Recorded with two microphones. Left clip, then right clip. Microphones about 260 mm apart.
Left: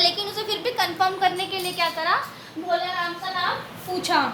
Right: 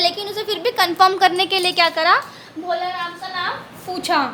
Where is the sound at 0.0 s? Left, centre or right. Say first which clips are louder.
Right 2 dB; right.